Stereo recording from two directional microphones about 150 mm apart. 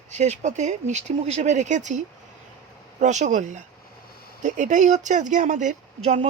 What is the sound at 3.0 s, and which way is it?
A woman's voice, 50° right (ahead or behind).